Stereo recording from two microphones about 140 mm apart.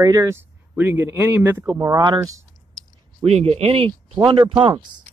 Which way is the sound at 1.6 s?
30° right (ahead or behind).